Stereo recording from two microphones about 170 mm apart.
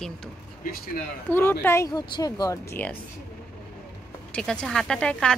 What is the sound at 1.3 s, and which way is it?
Speech, 15° left (ahead or behind).